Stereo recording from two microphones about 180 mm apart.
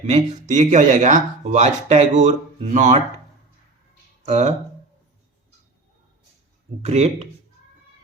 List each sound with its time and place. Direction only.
0.0 s speech: 40° right (ahead or behind)
4.3 s speech: 40° right (ahead or behind)
6.8 s speech: 40° right (ahead or behind)